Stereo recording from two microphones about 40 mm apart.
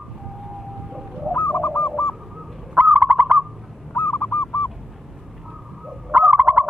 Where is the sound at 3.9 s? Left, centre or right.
Left.